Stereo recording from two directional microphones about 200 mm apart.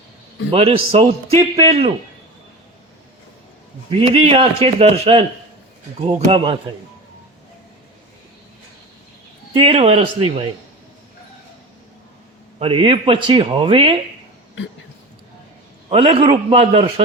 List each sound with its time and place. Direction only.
0.5 s a man's voice: 30° right (ahead or behind)
3.8 s a man's voice: 30° right (ahead or behind)
9.5 s a man's voice: 25° right (ahead or behind)
12.5 s a man's voice: 25° right (ahead or behind)
15.9 s a man's voice: 30° right (ahead or behind)